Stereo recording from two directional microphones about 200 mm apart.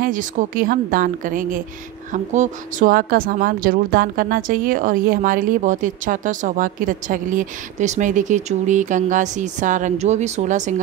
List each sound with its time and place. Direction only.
0.0 s a woman's voice: 40° right (ahead or behind)